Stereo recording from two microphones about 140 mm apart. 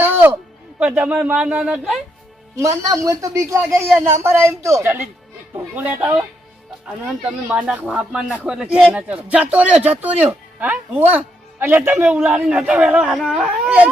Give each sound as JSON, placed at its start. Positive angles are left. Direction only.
{"t": 0.0, "sound": "music", "side_deg": -15}
{"t": 0.8, "sound": "a man's voice", "side_deg": -10}
{"t": 2.6, "sound": "a man's voice", "side_deg": -25}
{"t": 7.4, "sound": "a man's voice", "side_deg": -10}